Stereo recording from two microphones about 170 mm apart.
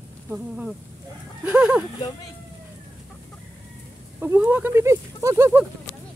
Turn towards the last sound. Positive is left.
turn(degrees=-15)  # may be behind; listen again after turning